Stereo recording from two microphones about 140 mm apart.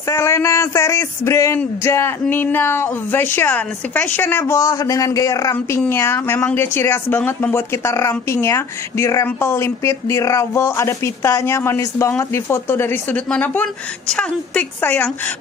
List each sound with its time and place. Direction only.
0.1 s speech: 20° left (ahead or behind)